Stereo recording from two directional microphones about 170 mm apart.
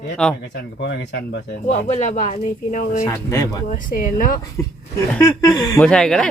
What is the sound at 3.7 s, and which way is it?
Speech, 55° left (ahead or behind).